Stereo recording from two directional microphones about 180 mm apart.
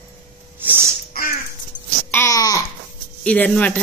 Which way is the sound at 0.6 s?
10° right (ahead or behind).